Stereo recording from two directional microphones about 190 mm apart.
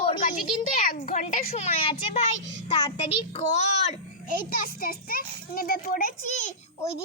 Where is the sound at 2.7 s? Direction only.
35° left (ahead or behind).